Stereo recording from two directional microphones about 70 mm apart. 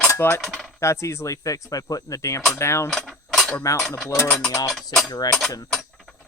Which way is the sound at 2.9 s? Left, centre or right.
Centre.